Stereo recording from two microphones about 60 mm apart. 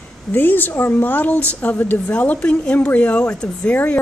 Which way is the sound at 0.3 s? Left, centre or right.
Left.